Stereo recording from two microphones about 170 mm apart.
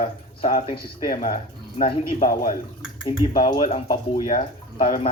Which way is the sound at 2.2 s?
55° left (ahead or behind).